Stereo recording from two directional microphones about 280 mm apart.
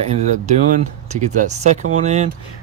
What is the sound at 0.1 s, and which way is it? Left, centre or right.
Speech, right.